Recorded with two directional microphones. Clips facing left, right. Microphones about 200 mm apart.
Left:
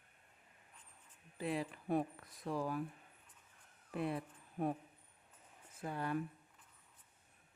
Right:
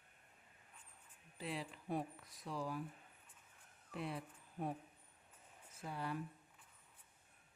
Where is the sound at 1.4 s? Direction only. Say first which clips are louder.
Left 6 dB; 55° left (ahead or behind).